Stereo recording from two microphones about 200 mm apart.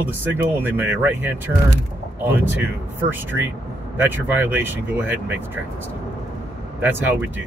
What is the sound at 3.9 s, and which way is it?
Speech, 10° right (ahead or behind).